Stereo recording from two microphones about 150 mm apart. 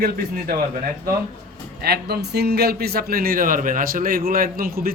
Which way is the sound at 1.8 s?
90° right.